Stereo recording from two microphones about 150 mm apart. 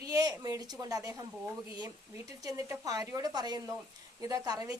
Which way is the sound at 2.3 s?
25° right (ahead or behind).